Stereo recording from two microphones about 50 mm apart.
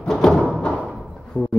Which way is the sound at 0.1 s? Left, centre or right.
Centre.